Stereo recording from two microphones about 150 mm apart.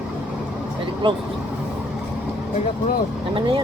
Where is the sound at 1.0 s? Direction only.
35° right (ahead or behind).